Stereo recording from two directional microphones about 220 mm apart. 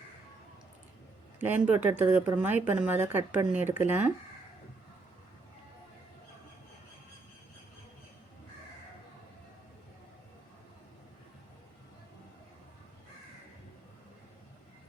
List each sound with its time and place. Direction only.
1.4 s speech: 10° right (ahead or behind)